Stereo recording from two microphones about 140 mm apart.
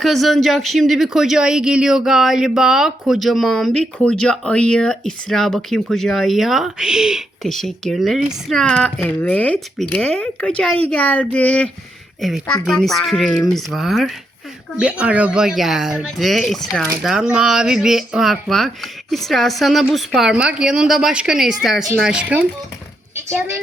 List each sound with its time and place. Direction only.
0.0 s speech: centre (ahead or behind)
23.1 s speech: 20° right (ahead or behind)